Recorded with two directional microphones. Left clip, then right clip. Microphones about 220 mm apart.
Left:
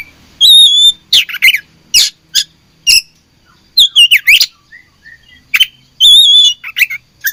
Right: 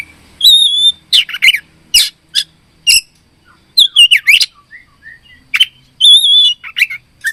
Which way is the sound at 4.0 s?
Centre (ahead or behind).